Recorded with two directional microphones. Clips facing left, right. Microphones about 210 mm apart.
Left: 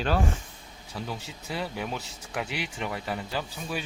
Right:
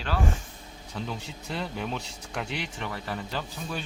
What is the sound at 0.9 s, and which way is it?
Speech, 5° left (ahead or behind).